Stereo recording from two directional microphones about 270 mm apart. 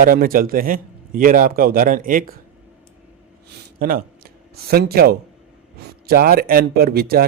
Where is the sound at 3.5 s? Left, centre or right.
Right.